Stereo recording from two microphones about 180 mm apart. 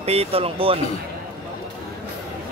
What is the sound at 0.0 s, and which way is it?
Speech, 35° right (ahead or behind).